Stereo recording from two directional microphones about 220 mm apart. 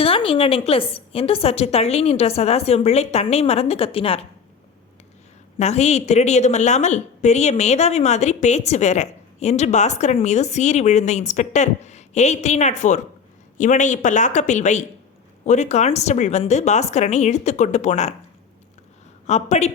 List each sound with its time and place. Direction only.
0.0 s a woman's voice: 25° left (ahead or behind)
5.5 s a woman's voice: 30° left (ahead or behind)
19.3 s a woman's voice: 30° left (ahead or behind)